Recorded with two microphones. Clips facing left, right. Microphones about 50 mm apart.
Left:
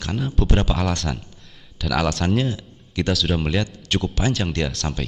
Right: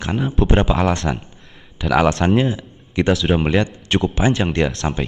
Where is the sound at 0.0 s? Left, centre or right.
Right.